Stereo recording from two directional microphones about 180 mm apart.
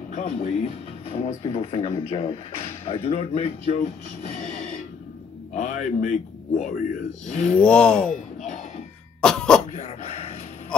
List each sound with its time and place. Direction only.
0.1 s speech: 45° left (ahead or behind)
1.0 s speech: 35° left (ahead or behind)
4.4 s a sound: 45° left (ahead or behind)
5.5 s speech: 45° left (ahead or behind)
7.6 s speech: 5° left (ahead or behind)
9.2 s throat clearing: 5° left (ahead or behind)
9.7 s dog: 35° left (ahead or behind)